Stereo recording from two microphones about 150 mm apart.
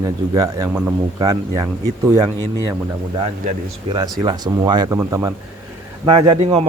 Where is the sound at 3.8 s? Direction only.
25° right (ahead or behind).